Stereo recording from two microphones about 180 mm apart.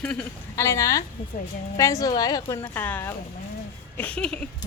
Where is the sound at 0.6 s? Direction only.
15° left (ahead or behind).